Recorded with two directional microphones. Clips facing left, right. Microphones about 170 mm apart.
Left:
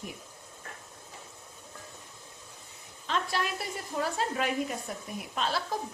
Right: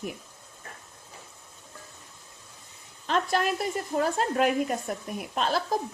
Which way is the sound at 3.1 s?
50° right (ahead or behind).